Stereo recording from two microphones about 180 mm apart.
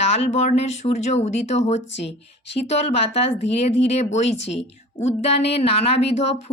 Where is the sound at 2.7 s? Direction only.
35° left (ahead or behind).